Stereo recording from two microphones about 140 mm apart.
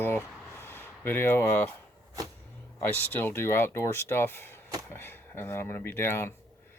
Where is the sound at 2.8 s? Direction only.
15° left (ahead or behind).